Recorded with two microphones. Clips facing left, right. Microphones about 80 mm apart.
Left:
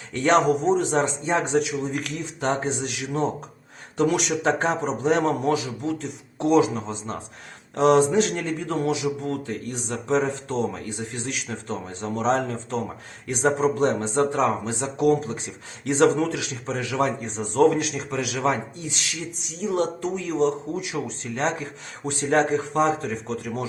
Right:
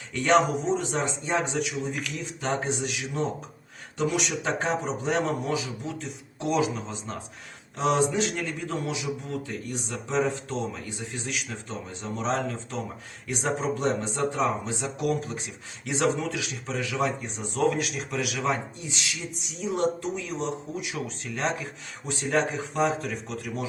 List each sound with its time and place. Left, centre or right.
0.1 s a man's voice: left
19.7 s a man's voice: left